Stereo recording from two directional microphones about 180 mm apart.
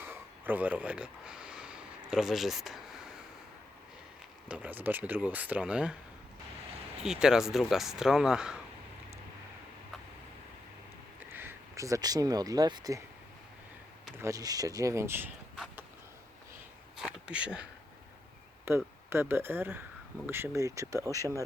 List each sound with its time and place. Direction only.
0.0 s a sound: 10° right (ahead or behind)
4.4 s speech: 10° right (ahead or behind)
7.0 s speech: 5° right (ahead or behind)
11.3 s speech: 10° right (ahead or behind)
14.2 s speech: 20° right (ahead or behind)
17.0 s speech: 5° right (ahead or behind)
18.7 s speech: 15° right (ahead or behind)